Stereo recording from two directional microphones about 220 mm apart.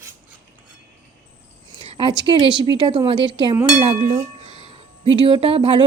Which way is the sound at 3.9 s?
30° right (ahead or behind).